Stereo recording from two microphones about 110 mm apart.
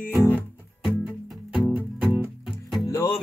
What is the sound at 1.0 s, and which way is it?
Music, 5° right (ahead or behind).